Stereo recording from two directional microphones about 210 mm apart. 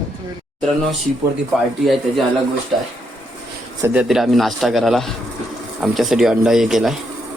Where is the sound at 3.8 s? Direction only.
5° right (ahead or behind).